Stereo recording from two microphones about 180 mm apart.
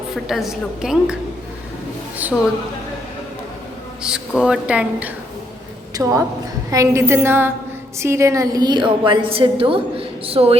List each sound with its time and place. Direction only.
0.3 s speech: centre (ahead or behind)
2.2 s a woman's voice: 10° right (ahead or behind)
4.0 s speech: 5° right (ahead or behind)
5.9 s a woman's voice: 20° right (ahead or behind)